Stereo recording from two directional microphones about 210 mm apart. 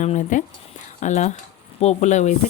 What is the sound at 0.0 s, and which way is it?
Speech, 35° left (ahead or behind).